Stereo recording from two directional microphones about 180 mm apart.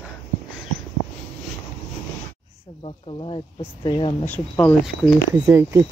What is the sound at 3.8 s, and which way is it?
Speech, 25° left (ahead or behind).